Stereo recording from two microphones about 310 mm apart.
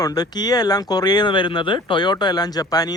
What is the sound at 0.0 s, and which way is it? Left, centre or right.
Speech, centre.